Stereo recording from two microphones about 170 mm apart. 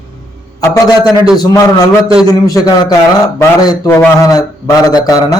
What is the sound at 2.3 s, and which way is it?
A man's voice, 20° left (ahead or behind).